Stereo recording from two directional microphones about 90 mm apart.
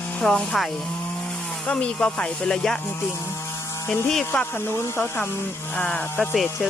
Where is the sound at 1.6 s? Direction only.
15° left (ahead or behind).